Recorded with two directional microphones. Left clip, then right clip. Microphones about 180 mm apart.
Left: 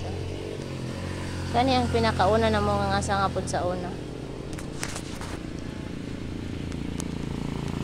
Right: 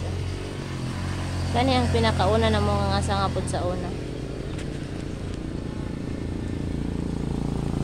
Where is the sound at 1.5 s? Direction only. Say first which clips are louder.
Even; 15° left (ahead or behind).